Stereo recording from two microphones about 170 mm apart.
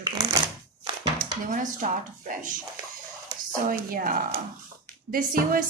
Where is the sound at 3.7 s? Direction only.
55° right (ahead or behind).